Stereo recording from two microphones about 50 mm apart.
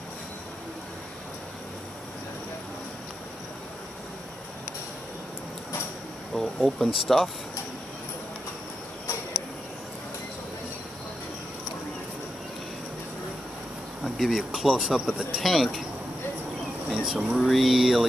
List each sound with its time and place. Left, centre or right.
6.3 s speech: centre
14.0 s speech: centre
16.9 s speech: centre
17.4 s speech: centre